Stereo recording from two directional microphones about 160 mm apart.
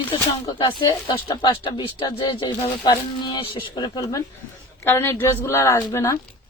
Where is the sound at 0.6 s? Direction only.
30° left (ahead or behind).